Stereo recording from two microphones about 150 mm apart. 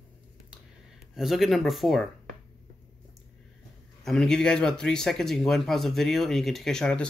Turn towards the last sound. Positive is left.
turn(degrees=5)  # may be behind; listen again after turning